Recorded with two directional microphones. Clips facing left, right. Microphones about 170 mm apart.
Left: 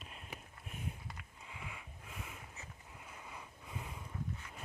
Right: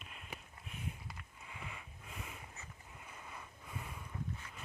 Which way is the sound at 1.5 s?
10° left (ahead or behind).